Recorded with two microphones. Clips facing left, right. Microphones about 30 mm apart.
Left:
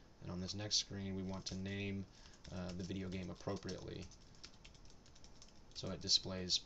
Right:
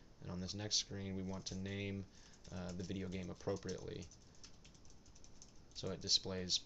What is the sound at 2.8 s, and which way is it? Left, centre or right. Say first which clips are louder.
Speech: right 1 dB; centre.